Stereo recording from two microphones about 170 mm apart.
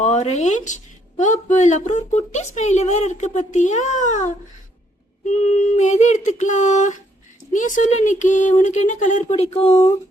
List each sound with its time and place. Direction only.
0.0 s speech: 40° left (ahead or behind)